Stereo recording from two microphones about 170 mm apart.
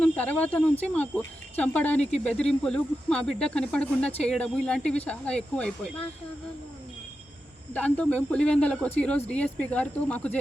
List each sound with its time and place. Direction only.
0.0 s speech: 10° left (ahead or behind)
2.0 s speech: 40° left (ahead or behind)
2.2 s speech: 5° left (ahead or behind)
7.7 s speech: 10° left (ahead or behind)